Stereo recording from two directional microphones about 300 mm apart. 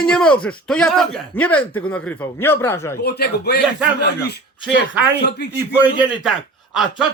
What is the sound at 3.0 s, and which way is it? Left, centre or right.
Speech, left.